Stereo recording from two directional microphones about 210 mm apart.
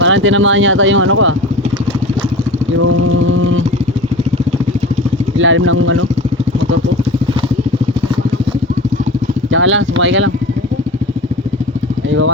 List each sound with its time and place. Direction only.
0.0 s speech: 65° right (ahead or behind)
2.8 s vehicle: 70° right (ahead or behind)
5.4 s speech: 65° right (ahead or behind)
9.5 s speech: 65° right (ahead or behind)